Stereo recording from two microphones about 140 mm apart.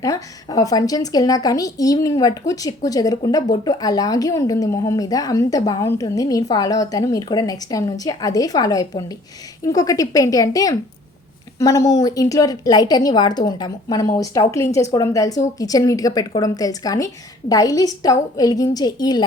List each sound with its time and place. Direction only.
0.0 s a woman's voice: 25° left (ahead or behind)